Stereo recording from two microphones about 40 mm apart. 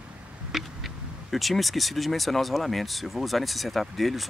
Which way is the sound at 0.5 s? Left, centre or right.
Centre.